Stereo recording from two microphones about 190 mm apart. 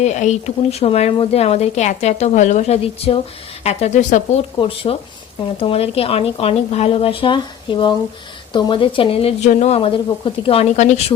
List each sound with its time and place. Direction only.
0.0 s speech: 35° left (ahead or behind)